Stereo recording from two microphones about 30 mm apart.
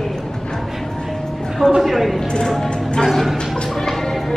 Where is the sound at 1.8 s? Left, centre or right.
Centre.